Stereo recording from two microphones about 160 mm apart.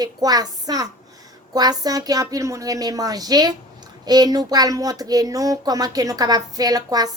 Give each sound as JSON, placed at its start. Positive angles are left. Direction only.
{"t": 0.0, "sound": "speech", "side_deg": -25}